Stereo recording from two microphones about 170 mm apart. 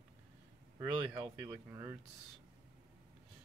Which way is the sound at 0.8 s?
10° right (ahead or behind).